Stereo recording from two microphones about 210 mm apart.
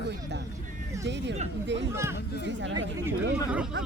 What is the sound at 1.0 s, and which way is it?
Speech, 55° right (ahead or behind).